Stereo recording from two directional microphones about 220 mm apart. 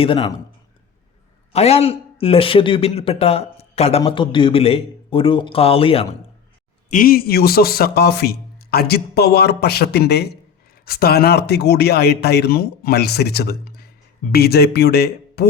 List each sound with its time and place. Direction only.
0.0 s a man's voice: 20° left (ahead or behind)
1.5 s a man's voice: 30° left (ahead or behind)
6.9 s a man's voice: 40° left (ahead or behind)